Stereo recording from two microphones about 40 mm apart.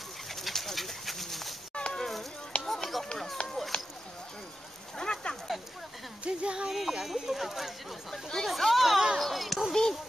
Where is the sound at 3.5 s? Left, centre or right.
Centre.